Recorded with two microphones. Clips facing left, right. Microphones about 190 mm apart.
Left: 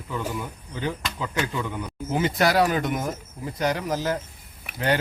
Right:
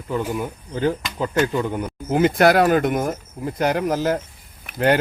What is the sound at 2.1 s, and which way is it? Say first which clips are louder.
Speech: right 6 dB; 55° right (ahead or behind).